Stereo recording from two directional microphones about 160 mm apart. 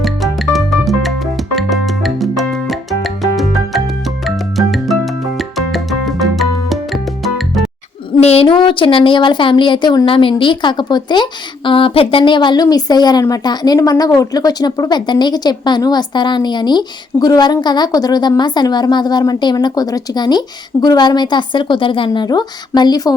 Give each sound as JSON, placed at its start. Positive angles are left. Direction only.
{"t": 0.0, "sound": "music", "side_deg": 0}
{"t": 4.5, "sound": "music", "side_deg": 0}
{"t": 8.2, "sound": "speech", "side_deg": 40}